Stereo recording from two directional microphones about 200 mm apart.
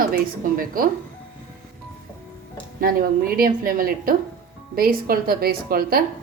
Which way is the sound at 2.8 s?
45° right (ahead or behind).